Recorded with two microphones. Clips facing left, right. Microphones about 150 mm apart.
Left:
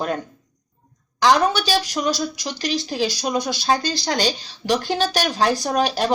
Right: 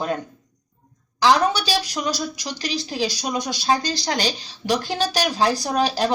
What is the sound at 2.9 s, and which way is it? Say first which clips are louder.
Speech: even; 10° right (ahead or behind).